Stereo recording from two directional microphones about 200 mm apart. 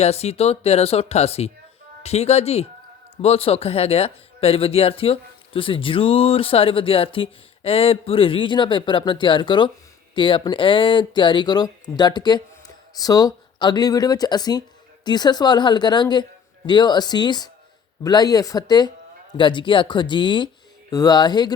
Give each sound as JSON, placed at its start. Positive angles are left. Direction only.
{"t": 0.0, "sound": "speech", "side_deg": 30}